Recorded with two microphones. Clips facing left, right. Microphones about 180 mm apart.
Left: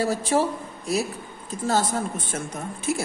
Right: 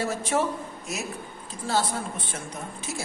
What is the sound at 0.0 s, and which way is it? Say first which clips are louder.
Speech: left 4 dB; 35° left (ahead or behind).